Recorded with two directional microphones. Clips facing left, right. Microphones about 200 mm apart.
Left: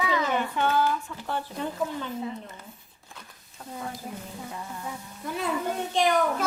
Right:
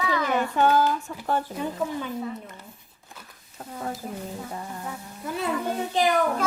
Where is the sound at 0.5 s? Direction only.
40° right (ahead or behind).